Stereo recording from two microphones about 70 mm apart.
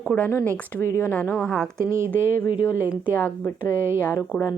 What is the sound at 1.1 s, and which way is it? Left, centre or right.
Speech, centre.